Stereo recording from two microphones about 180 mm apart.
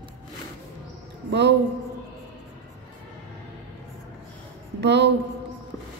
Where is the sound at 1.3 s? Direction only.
75° right (ahead or behind).